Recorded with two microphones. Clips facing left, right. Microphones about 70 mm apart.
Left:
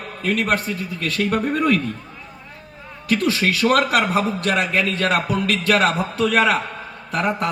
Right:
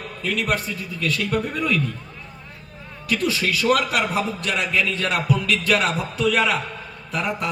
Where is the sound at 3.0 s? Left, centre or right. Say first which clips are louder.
Left 3 dB; left.